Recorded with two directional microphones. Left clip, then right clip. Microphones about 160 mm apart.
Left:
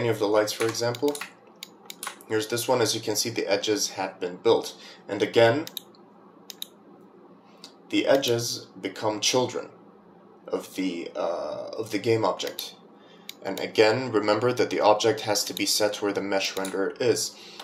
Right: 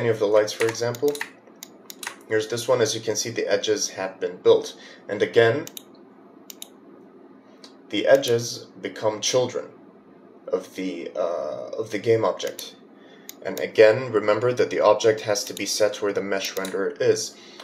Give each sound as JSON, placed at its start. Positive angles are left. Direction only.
{"t": 0.1, "sound": "speech", "side_deg": 25}
{"t": 2.2, "sound": "speech", "side_deg": 25}
{"t": 8.2, "sound": "speech", "side_deg": 25}
{"t": 13.7, "sound": "speech", "side_deg": 25}